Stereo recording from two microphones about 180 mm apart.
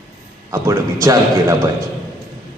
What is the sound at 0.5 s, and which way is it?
A man's voice, 15° right (ahead or behind).